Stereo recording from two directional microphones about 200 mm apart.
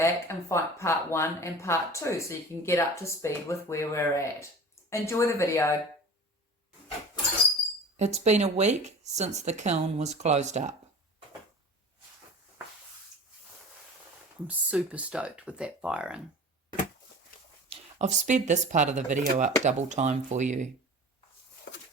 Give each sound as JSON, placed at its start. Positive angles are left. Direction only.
{"t": 0.0, "sound": "speech", "side_deg": 15}
{"t": 7.9, "sound": "speech", "side_deg": -35}
{"t": 14.4, "sound": "speech", "side_deg": -5}
{"t": 17.7, "sound": "speech", "side_deg": -35}